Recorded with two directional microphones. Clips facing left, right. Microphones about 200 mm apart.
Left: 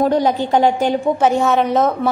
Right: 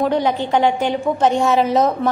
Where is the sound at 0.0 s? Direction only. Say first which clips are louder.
Left 2 dB; 40° left (ahead or behind).